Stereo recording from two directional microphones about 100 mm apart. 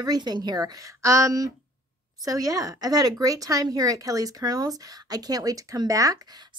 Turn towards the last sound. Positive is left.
turn(degrees=-35)  # may be behind; listen again after turning